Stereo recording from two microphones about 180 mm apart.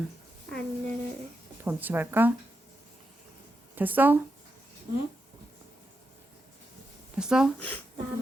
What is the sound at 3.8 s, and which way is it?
Speech, 10° right (ahead or behind).